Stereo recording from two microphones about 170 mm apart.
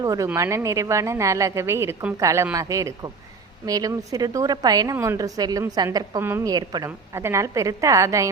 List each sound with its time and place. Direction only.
0.0 s a woman's voice: 20° right (ahead or behind)